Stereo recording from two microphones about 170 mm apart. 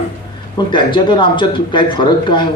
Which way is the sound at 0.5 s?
25° left (ahead or behind).